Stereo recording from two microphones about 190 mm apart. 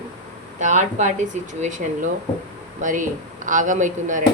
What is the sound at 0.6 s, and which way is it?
Speech, 40° right (ahead or behind).